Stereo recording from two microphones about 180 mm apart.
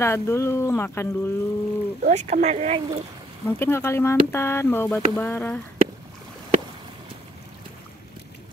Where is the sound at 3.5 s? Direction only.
15° left (ahead or behind).